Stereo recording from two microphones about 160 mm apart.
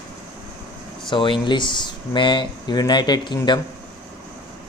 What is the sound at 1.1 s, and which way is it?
Speech, 30° left (ahead or behind).